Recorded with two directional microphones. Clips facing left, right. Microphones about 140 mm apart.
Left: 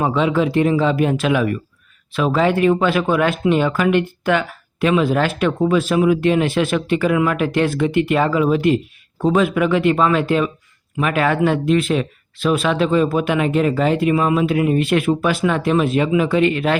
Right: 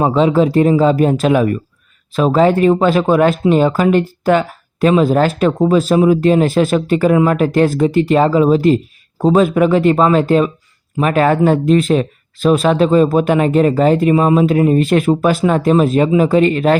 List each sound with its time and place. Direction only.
0.0 s speech: 35° right (ahead or behind)